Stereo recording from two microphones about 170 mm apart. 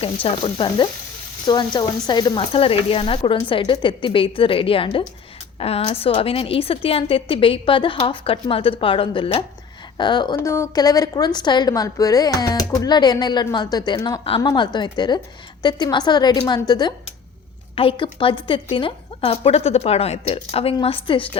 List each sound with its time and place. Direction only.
0.0 s a woman's voice: 35° left (ahead or behind)